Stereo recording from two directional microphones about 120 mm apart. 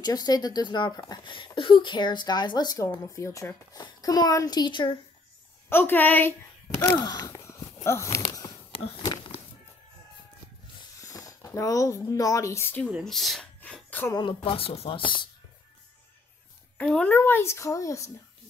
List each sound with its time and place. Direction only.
0.0 s speech: 35° left (ahead or behind)
5.7 s a woman's voice: 20° left (ahead or behind)
6.8 s groan: 30° left (ahead or behind)
11.1 s speech: 30° left (ahead or behind)
13.0 s speech: centre (ahead or behind)
13.8 s a sound: 15° left (ahead or behind)
14.4 s speech: 50° left (ahead or behind)
16.7 s a woman's voice: 10° left (ahead or behind); by 18.1 s 25° left (ahead or behind)